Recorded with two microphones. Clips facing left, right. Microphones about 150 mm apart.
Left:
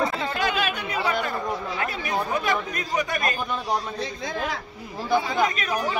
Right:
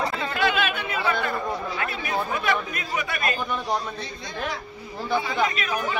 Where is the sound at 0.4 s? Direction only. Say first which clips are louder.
Right 3 dB; 40° left (ahead or behind).